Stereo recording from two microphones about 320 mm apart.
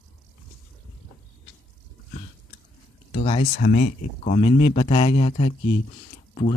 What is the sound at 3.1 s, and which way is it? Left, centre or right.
Speech, centre.